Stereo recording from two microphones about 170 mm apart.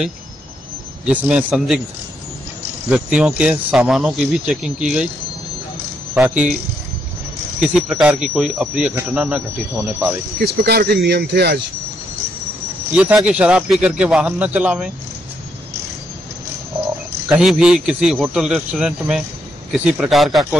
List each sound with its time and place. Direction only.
1.0 s speech: 5° right (ahead or behind)
2.9 s speech: 5° right (ahead or behind)
6.1 s speech: 10° right (ahead or behind)
7.6 s speech: 5° right (ahead or behind)
10.6 s speech: 70° right (ahead or behind)
12.9 s speech: 5° right (ahead or behind)
17.3 s speech: 5° right (ahead or behind)